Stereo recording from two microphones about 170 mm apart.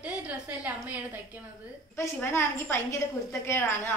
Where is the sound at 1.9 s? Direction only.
15° left (ahead or behind).